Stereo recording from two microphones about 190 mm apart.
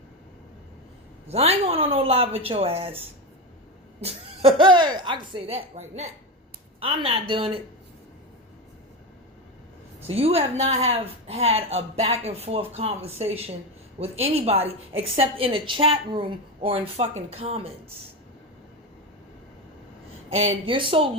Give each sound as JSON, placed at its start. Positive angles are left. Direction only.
{"t": 1.3, "sound": "speech", "side_deg": -35}
{"t": 4.0, "sound": "speech", "side_deg": -25}
{"t": 10.1, "sound": "speech", "side_deg": -30}
{"t": 20.3, "sound": "speech", "side_deg": -30}